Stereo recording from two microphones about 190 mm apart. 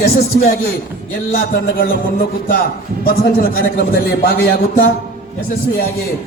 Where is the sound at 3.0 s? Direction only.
50° left (ahead or behind).